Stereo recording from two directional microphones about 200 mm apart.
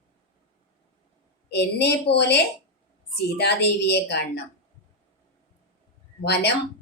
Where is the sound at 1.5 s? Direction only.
60° left (ahead or behind).